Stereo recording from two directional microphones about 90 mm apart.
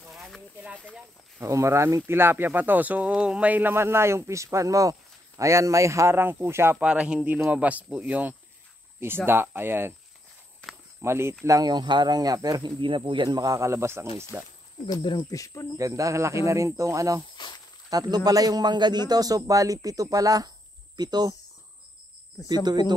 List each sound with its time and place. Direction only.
0.1 s a sound: centre (ahead or behind)
1.4 s speech: 30° right (ahead or behind)
6.8 s speech: 10° right (ahead or behind)
11.0 s speech: 30° right (ahead or behind)
11.4 s a man's voice: 45° right (ahead or behind); by 13.4 s 65° right (ahead or behind)
13.4 s speech: 35° right (ahead or behind)
14.9 s speech: 55° left (ahead or behind)
15.3 s speech: 40° left (ahead or behind)
15.8 s speech: 35° right (ahead or behind)
17.4 s speech: 60° left (ahead or behind)
17.8 s a man's voice: 45° right (ahead or behind)
22.5 s a man's voice: 50° right (ahead or behind)